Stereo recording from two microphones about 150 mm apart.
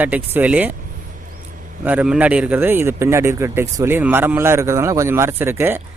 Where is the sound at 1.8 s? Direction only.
5° right (ahead or behind).